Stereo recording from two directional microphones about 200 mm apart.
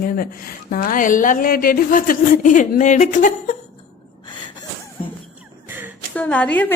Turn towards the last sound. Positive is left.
turn(degrees=10)  # may be behind; listen again after turning